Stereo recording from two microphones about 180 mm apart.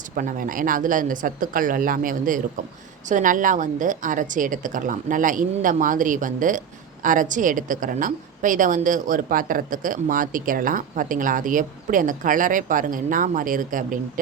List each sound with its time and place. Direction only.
0.2 s a woman's voice: 50° right (ahead or behind)